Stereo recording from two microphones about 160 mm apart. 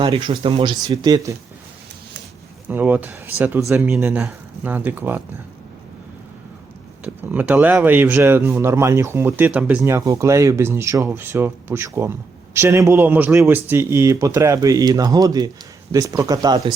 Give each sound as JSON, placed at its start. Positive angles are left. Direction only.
{"t": 0.0, "sound": "speech", "side_deg": -30}
{"t": 2.6, "sound": "speech", "side_deg": -10}
{"t": 7.0, "sound": "speech", "side_deg": -10}